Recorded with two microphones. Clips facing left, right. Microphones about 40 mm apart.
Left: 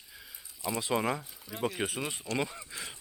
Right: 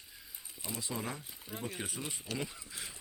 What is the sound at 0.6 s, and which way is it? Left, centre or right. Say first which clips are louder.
Speech: left 10 dB; left.